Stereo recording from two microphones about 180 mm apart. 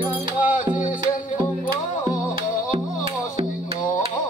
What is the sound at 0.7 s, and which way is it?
Music, 45° left (ahead or behind).